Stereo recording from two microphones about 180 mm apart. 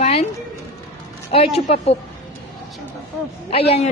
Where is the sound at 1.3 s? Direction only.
35° left (ahead or behind).